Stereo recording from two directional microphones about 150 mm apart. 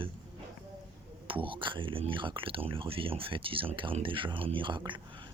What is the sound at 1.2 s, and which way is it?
Speech, 35° right (ahead or behind).